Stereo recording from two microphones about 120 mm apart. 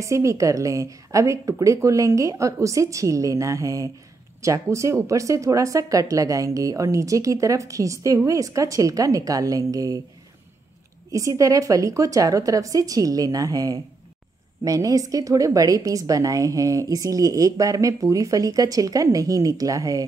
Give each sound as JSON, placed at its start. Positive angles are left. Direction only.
{"t": 0.0, "sound": "speech", "side_deg": -25}
{"t": 11.1, "sound": "speech", "side_deg": -30}